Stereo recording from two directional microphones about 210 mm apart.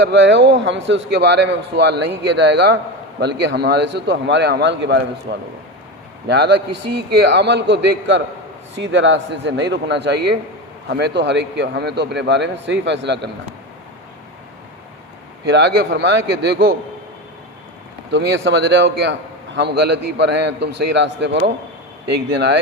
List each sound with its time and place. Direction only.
0.1 s a man's voice: 60° right (ahead or behind)
15.4 s a man's voice: 55° right (ahead or behind)
18.1 s a man's voice: 55° right (ahead or behind)